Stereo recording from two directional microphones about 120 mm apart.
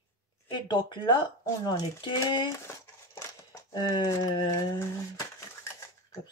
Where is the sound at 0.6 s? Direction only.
35° left (ahead or behind).